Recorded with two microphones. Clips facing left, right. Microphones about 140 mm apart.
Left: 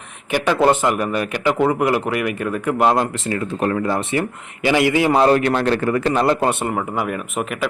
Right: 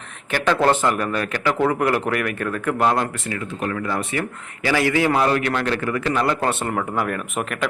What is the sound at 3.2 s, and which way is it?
Speech, 40° left (ahead or behind).